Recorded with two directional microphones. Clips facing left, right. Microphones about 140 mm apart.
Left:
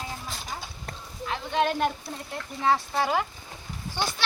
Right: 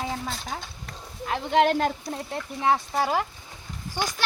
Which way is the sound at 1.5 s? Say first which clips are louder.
Right 4 dB; 90° right.